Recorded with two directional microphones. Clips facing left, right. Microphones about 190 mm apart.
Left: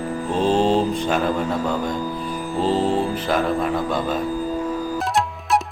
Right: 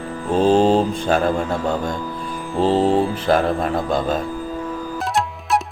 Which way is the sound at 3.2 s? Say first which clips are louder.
Right 3 dB; 45° right (ahead or behind).